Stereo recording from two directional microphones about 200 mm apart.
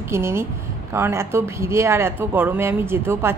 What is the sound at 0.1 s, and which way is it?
A woman's voice, 10° right (ahead or behind).